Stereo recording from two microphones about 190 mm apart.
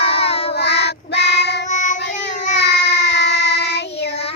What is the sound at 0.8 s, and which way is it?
Child singing, 60° left (ahead or behind).